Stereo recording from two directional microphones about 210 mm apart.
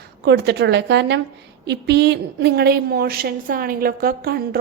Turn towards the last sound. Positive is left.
turn(degrees=-45)  # may be behind; listen again after turning